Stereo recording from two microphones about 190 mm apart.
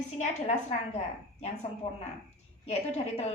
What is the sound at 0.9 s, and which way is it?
Speech, 35° left (ahead or behind).